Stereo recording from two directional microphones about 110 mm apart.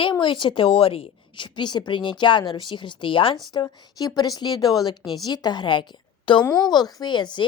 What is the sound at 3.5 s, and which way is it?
A woman's voice, 40° left (ahead or behind).